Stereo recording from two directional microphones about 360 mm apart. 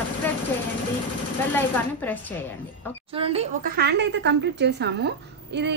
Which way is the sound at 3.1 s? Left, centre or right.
Centre.